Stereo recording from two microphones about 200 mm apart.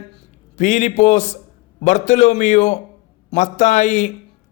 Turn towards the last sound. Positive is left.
turn(degrees=35)  # may be behind; listen again after turning